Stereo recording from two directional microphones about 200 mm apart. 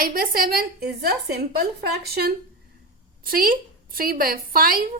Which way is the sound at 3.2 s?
45° right (ahead or behind).